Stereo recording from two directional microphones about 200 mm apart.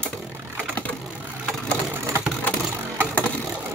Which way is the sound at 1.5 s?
Centre (ahead or behind).